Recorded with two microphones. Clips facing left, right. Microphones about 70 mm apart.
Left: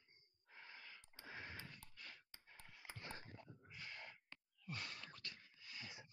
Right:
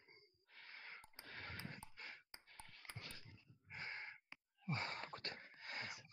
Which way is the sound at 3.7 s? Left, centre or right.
Right.